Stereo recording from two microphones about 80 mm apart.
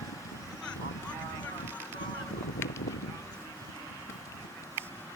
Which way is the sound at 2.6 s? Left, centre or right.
Left.